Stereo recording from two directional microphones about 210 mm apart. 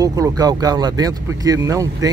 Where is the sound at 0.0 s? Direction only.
15° right (ahead or behind).